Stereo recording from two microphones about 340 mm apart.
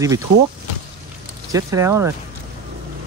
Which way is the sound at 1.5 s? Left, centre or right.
Centre.